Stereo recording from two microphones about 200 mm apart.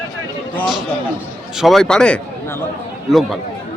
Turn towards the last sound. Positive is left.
turn(degrees=0)  # may be behind; listen again after turning